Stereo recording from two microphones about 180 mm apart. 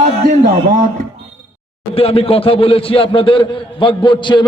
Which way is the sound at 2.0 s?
35° left (ahead or behind).